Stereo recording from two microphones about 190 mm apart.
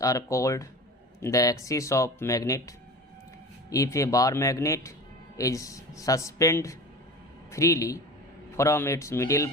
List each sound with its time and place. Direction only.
0.0 s speech: 15° left (ahead or behind)